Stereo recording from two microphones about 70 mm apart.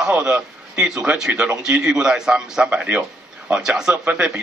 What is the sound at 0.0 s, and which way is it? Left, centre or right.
A man's voice, centre.